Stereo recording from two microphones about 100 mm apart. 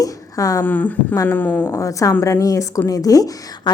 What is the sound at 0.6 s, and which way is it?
Speech, 15° left (ahead or behind).